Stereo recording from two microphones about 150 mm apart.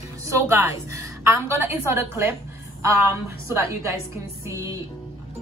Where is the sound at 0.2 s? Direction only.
20° right (ahead or behind).